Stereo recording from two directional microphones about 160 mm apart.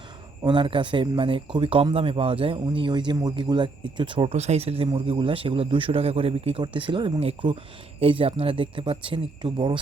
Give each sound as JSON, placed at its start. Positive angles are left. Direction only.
{"t": 0.4, "sound": "a man's voice", "side_deg": -30}